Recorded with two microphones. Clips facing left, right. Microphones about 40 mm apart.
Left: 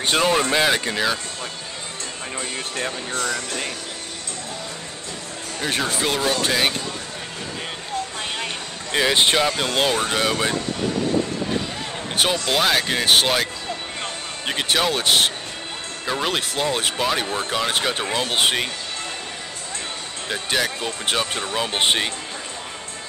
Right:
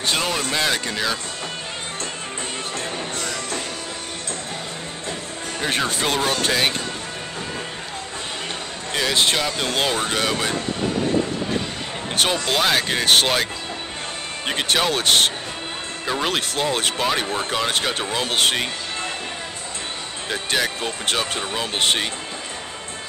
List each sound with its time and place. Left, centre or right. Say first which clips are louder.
0.1 s speech: left 5 dB; centre
2.8 s speech: left 2 dB; left
5.6 s speech: right 1 dB; centre
8.9 s speech: left 2 dB; centre
9.6 s speech: left 1 dB; centre
12.2 s speech: even; centre
20.2 s speech: even; centre